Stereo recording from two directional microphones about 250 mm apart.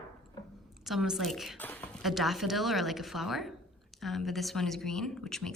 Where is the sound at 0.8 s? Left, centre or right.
Centre.